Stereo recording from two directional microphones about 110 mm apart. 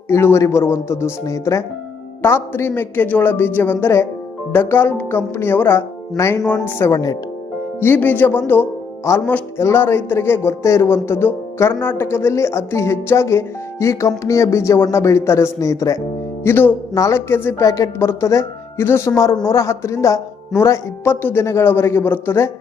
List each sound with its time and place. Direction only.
0.1 s speech: 25° left (ahead or behind)
6.9 s speech: 35° left (ahead or behind)
7.8 s speech: 20° left (ahead or behind)